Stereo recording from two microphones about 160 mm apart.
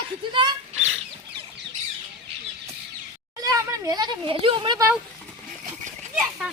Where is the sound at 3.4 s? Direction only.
20° right (ahead or behind).